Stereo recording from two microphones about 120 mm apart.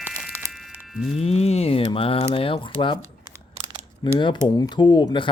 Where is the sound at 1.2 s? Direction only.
65° left (ahead or behind); by 3.0 s 45° left (ahead or behind).